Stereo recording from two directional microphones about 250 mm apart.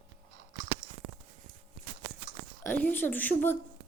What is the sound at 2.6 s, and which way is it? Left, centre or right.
Speech, centre.